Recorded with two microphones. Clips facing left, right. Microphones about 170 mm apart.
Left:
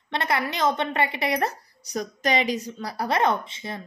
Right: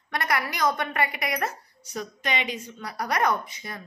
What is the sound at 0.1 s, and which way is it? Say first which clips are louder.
A woman's voice: left 2 dB; 25° left (ahead or behind).